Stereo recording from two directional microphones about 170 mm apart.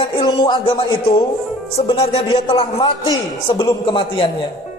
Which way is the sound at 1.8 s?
40° left (ahead or behind).